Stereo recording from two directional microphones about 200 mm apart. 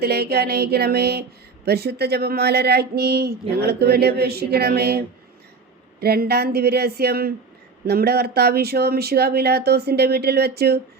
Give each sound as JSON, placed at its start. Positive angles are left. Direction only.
{"t": 0.0, "sound": "speech", "side_deg": -55}